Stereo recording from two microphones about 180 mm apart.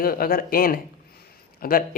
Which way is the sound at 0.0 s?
55° left (ahead or behind).